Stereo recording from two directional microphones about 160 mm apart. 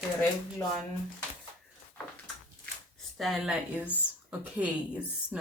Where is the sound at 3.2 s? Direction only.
Centre (ahead or behind).